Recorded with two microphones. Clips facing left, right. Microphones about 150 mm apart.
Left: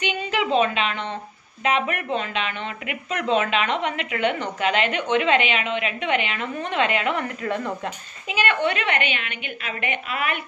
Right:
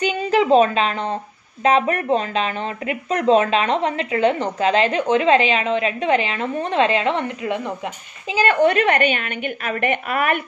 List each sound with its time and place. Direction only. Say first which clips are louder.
0.0 s a woman's voice: right 7 dB; 40° right (ahead or behind); by 7.7 s 15° right (ahead or behind)
8.3 s a woman's voice: right 6 dB; 35° right (ahead or behind)